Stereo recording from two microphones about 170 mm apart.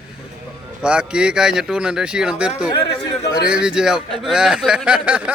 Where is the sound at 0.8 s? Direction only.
5° right (ahead or behind).